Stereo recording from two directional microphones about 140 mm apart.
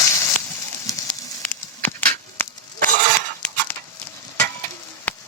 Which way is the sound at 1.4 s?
10° left (ahead or behind).